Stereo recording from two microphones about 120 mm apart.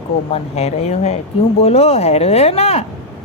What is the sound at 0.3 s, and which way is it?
A woman's voice, 60° left (ahead or behind).